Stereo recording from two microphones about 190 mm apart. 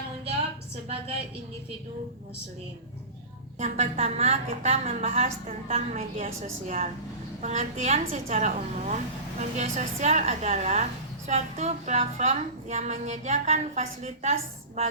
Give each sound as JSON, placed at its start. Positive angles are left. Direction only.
{"t": 3.6, "sound": "a woman's voice", "side_deg": -35}